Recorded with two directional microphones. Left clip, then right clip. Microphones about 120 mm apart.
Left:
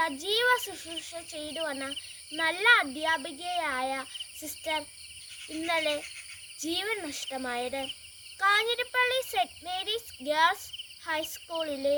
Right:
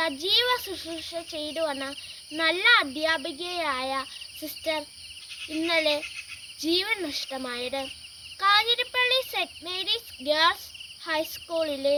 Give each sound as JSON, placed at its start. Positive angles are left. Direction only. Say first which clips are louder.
{"t": 0.0, "sound": "a child's voice", "louder": "right 3 dB", "side_deg": 35}
{"t": 11.2, "sound": "a child's voice", "louder": "right 5 dB", "side_deg": 30}